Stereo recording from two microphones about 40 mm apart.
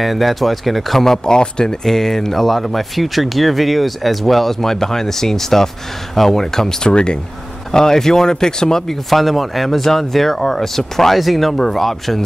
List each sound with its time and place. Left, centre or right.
0.0 s speech: centre
6.9 s speech: left
7.7 s speech: centre
9.1 s speech: centre